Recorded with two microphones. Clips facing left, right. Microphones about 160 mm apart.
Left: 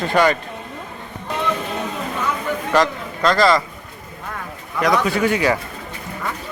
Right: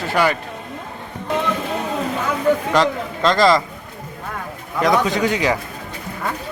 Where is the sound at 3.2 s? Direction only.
25° right (ahead or behind).